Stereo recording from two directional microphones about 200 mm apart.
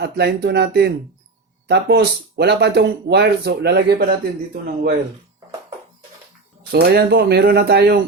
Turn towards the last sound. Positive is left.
turn(degrees=-55)  # may be behind; listen again after turning